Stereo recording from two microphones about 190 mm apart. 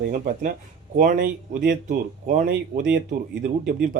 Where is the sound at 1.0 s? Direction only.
45° right (ahead or behind).